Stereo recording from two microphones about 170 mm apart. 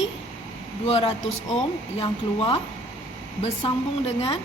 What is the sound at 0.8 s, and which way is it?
A woman's voice, 40° left (ahead or behind).